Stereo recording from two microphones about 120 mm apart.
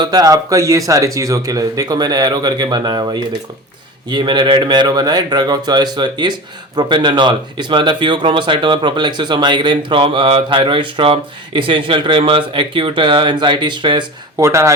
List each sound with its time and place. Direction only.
0.0 s speech: 35° right (ahead or behind)
14.4 s speech: 25° right (ahead or behind)